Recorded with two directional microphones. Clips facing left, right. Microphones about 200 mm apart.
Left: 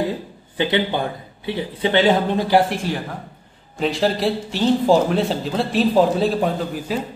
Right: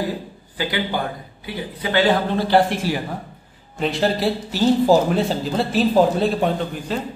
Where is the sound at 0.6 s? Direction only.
25° left (ahead or behind).